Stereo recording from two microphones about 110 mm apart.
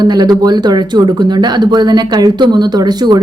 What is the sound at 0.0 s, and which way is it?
Speech, 40° right (ahead or behind).